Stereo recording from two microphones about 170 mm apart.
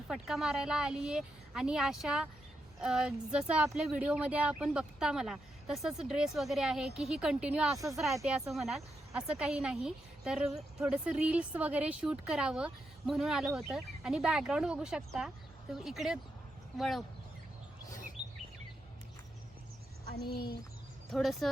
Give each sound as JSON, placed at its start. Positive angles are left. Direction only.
{"t": 0.1, "sound": "speech", "side_deg": -5}
{"t": 20.3, "sound": "speech", "side_deg": 65}
{"t": 21.1, "sound": "speech", "side_deg": 0}